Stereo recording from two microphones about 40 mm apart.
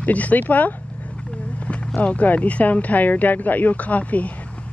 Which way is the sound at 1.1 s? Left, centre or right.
Left.